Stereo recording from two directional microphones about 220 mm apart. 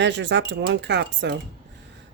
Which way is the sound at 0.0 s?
50° right (ahead or behind).